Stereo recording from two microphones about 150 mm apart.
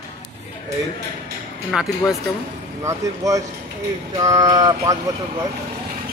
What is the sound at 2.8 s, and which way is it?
Speech, 20° right (ahead or behind).